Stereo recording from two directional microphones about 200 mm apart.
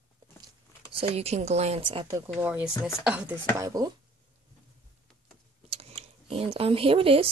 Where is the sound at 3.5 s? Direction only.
15° right (ahead or behind).